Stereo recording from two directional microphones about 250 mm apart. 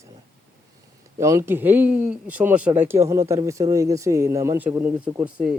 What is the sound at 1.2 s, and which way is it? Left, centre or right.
Speech, centre.